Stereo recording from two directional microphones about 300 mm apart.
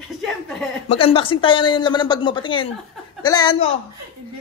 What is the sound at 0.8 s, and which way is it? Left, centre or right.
A man's voice, centre.